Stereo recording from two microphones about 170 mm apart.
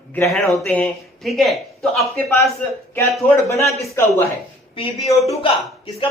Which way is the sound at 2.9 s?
15° left (ahead or behind).